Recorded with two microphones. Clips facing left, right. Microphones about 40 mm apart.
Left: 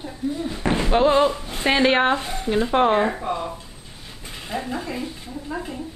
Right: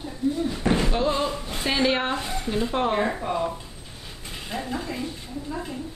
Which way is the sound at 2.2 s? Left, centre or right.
Centre.